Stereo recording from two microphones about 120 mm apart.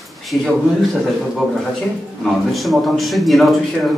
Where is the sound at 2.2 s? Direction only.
Centre (ahead or behind).